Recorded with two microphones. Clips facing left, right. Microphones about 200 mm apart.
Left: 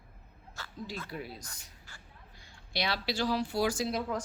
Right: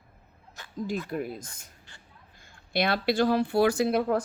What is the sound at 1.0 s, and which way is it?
Speech, 50° right (ahead or behind).